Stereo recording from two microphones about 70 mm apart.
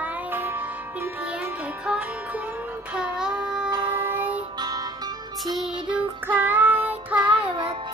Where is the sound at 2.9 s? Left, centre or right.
Centre.